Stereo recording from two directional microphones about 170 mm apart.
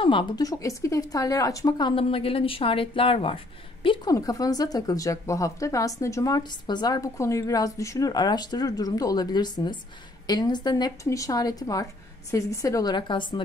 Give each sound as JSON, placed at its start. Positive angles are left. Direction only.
{"t": 0.0, "sound": "speech", "side_deg": 30}